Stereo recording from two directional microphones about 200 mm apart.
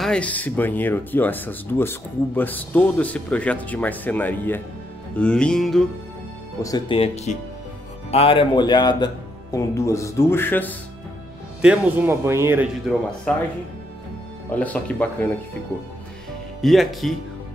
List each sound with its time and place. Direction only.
0.0 s speech: 5° left (ahead or behind)
5.1 s music: 5° left (ahead or behind)
6.6 s speech: 20° left (ahead or behind)
11.6 s speech: 5° right (ahead or behind)
14.5 s speech: 5° left (ahead or behind)
16.6 s music: centre (ahead or behind)